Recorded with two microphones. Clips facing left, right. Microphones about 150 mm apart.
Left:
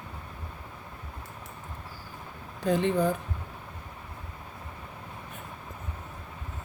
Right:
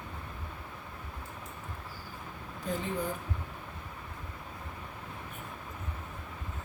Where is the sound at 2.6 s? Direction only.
80° left.